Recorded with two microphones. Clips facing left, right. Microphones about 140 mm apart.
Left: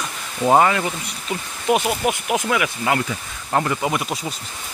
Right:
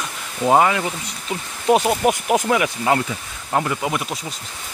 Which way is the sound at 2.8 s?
20° right (ahead or behind).